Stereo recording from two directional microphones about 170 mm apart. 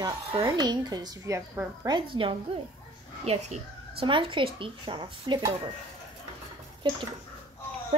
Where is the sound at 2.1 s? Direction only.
30° right (ahead or behind).